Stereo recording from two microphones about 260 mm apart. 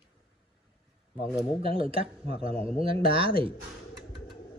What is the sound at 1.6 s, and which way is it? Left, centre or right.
Speech, right.